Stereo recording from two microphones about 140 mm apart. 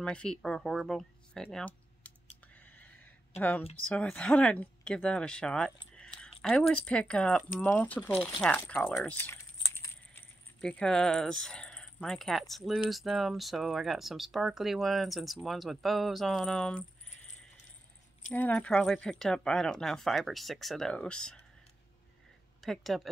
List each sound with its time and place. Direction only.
0.0 s speech: 5° left (ahead or behind)
2.5 s a sound: 10° left (ahead or behind)
3.9 s speech: 10° left (ahead or behind)
5.9 s a sound: 5° left (ahead or behind)
6.7 s speech: 10° left (ahead or behind)
8.9 s typing: 15° left (ahead or behind)
10.6 s speech: 5° left (ahead or behind)
18.3 s speech: 10° left (ahead or behind)
22.6 s speech: centre (ahead or behind)